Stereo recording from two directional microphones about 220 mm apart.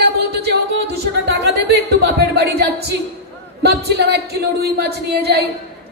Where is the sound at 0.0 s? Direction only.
45° right (ahead or behind).